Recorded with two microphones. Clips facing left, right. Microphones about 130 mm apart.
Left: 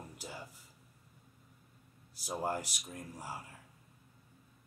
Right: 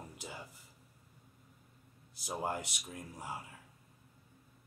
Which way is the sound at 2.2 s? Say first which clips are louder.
Left 1 dB; 20° right (ahead or behind).